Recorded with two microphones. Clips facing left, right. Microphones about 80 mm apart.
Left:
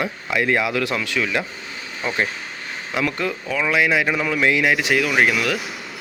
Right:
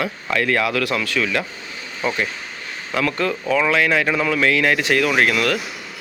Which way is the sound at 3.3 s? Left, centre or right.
Centre.